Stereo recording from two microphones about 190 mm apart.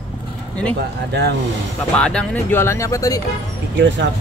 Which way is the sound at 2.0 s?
5° left (ahead or behind).